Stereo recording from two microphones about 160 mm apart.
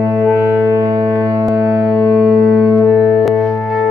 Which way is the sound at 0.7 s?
20° right (ahead or behind).